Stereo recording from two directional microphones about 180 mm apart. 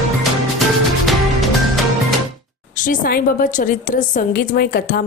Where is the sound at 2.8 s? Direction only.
50° left (ahead or behind).